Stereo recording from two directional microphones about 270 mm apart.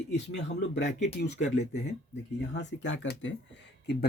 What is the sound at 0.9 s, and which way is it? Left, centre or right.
Speech, left.